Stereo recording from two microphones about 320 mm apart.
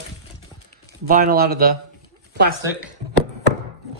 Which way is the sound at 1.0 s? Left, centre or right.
Right.